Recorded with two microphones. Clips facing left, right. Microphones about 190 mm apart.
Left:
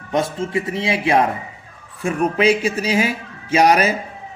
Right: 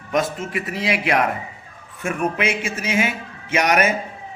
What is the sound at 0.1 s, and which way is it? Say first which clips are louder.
A man's voice: left 2 dB; 30° left (ahead or behind).